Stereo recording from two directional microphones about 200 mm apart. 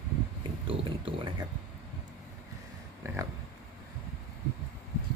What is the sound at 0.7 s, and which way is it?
Speech, 25° right (ahead or behind).